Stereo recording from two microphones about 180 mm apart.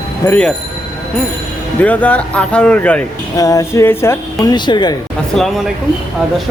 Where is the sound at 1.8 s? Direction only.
10° left (ahead or behind).